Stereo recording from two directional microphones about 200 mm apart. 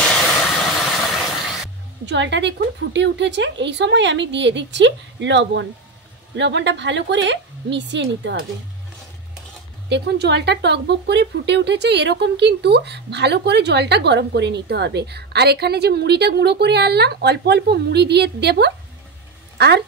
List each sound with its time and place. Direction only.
0.0 s a sound: 5° left (ahead or behind)
2.0 s speech: 60° right (ahead or behind)
9.8 s speech: 55° right (ahead or behind)